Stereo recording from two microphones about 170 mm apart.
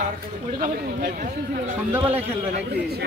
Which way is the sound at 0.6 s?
60° right (ahead or behind).